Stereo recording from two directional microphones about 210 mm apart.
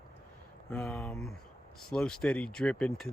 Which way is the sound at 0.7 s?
10° left (ahead or behind).